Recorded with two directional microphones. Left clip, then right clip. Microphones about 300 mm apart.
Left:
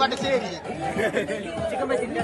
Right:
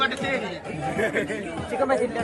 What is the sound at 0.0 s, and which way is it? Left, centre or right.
A man's voice, centre.